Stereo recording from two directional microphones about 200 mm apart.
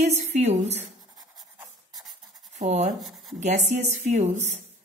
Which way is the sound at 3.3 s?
35° right (ahead or behind).